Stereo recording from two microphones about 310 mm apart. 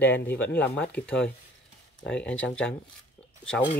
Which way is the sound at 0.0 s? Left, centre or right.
Centre.